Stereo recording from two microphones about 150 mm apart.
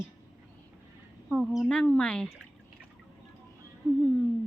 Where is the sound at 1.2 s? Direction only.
Centre (ahead or behind).